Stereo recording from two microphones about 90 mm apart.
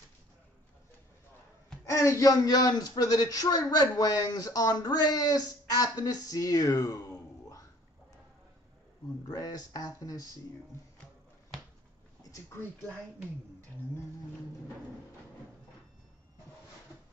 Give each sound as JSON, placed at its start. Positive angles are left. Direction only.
{"t": 1.9, "sound": "speech", "side_deg": 40}
{"t": 9.3, "sound": "speech", "side_deg": 45}
{"t": 12.2, "sound": "a sound", "side_deg": 35}